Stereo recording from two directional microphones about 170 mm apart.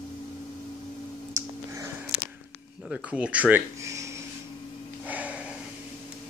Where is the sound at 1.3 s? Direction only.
15° right (ahead or behind).